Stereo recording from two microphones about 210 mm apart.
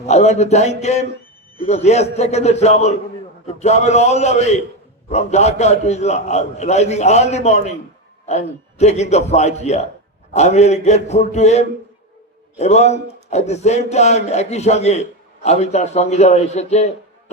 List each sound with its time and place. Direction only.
0.1 s a man's voice: 30° left (ahead or behind)